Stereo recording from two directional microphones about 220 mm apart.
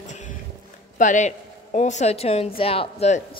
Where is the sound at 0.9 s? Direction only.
35° left (ahead or behind).